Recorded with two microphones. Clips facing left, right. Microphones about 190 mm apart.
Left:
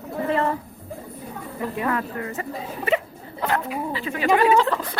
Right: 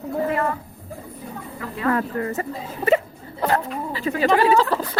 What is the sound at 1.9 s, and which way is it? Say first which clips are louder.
A woman's voice: right 4 dB; 40° right (ahead or behind).